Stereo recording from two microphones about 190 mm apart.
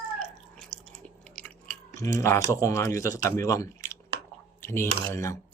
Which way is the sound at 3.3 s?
15° left (ahead or behind).